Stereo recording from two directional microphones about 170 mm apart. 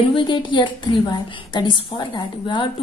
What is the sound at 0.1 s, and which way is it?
A woman's voice, 30° left (ahead or behind).